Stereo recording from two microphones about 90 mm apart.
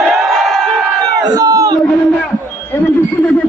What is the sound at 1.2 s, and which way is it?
Crowd, 45° right (ahead or behind).